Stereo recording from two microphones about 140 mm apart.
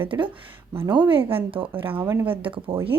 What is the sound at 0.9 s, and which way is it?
Speech, 35° right (ahead or behind).